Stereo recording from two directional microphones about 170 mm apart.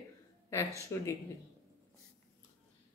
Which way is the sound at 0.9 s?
15° left (ahead or behind).